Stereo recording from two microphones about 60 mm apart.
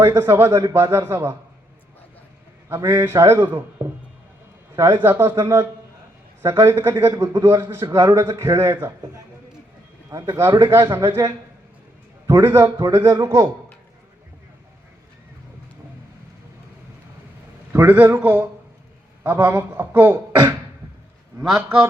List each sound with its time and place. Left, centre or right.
0.2 s a man's voice: right
2.6 s a man's voice: right
10.1 s a man's voice: right
10.3 s a man's voice: right
17.7 s a man's voice: right